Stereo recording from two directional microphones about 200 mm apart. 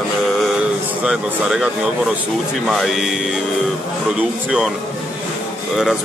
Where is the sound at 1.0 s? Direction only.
5° right (ahead or behind).